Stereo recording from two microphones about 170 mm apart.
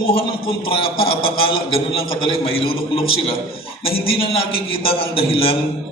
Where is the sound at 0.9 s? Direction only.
30° left (ahead or behind).